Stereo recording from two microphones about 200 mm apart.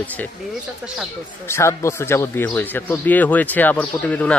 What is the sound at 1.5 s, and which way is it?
Speech, 15° left (ahead or behind).